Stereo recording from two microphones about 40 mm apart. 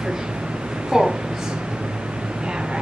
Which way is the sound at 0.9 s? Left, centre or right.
Centre.